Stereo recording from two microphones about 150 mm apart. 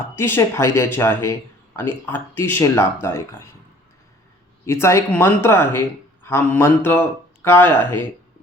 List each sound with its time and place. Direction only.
0.0 s speech: 15° left (ahead or behind)
4.6 s speech: 15° left (ahead or behind)